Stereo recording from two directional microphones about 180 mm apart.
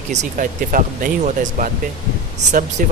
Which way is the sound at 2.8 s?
50° right (ahead or behind).